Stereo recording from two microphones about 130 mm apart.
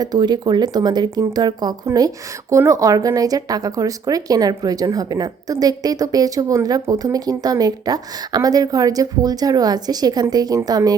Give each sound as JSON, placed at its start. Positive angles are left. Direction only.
{"t": 0.0, "sound": "speech", "side_deg": -30}